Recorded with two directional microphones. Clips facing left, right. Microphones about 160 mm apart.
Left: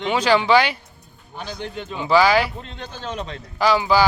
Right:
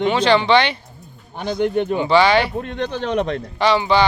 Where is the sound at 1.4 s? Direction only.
60° right (ahead or behind).